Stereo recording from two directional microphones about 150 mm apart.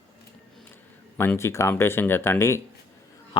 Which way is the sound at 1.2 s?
15° left (ahead or behind).